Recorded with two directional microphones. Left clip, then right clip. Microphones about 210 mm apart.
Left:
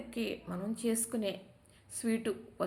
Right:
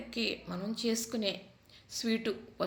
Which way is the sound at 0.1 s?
Centre (ahead or behind).